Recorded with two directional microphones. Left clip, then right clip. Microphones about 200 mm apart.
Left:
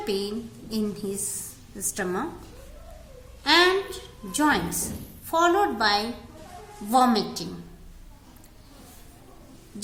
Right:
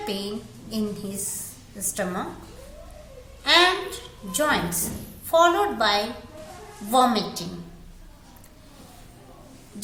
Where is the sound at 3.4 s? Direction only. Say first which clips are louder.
Right 1 dB; 20° left (ahead or behind).